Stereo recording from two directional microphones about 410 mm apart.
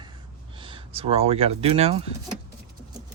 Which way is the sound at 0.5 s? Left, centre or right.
Centre.